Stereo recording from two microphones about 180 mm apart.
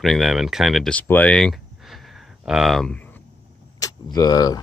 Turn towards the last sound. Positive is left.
turn(degrees=20)  # may be behind; listen again after turning